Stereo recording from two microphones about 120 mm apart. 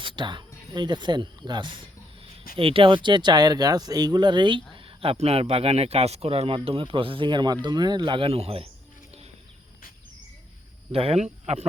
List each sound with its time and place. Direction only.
0.0 s speech: 40° right (ahead or behind)
4.7 s a sound: 50° right (ahead or behind)
5.2 s speech: 55° right (ahead or behind)
10.9 s speech: 55° right (ahead or behind)